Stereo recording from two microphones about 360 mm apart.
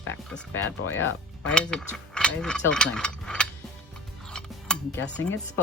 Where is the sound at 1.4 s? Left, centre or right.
Centre.